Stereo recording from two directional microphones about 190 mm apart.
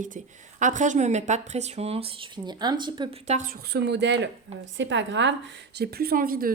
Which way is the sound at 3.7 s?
65° right (ahead or behind).